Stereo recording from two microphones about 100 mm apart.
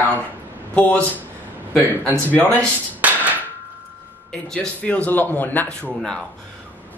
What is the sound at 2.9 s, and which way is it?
Music, 15° right (ahead or behind).